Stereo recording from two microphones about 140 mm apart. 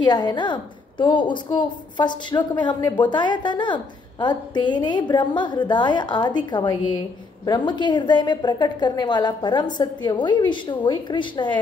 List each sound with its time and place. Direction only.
0.0 s a woman's voice: 30° left (ahead or behind)